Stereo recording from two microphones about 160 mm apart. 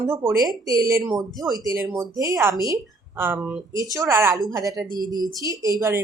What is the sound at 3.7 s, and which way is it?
A woman's voice, 20° right (ahead or behind).